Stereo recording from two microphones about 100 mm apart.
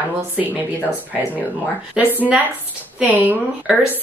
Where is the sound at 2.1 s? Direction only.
15° right (ahead or behind).